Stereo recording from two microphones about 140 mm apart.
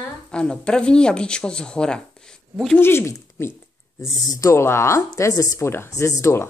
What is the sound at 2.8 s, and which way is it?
Speech, 15° left (ahead or behind).